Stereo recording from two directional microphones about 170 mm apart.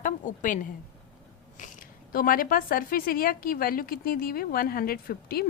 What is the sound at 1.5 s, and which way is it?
Speech, 50° left (ahead or behind).